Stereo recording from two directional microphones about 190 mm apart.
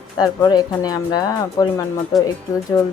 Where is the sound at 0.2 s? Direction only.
20° left (ahead or behind).